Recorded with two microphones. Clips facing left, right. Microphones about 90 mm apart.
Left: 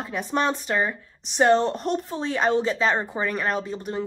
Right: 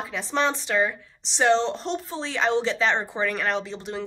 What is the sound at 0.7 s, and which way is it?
A woman's voice, 35° left (ahead or behind).